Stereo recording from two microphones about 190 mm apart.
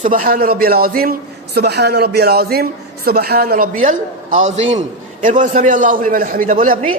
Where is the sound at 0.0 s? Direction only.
45° right (ahead or behind).